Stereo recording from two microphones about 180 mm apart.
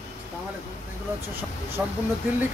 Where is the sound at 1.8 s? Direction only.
10° right (ahead or behind).